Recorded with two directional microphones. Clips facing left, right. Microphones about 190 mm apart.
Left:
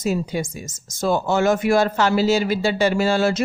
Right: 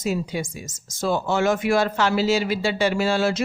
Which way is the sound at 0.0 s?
45° left (ahead or behind).